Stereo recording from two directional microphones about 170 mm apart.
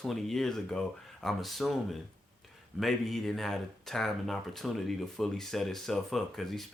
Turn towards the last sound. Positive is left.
turn(degrees=0)  # may be behind; listen again after turning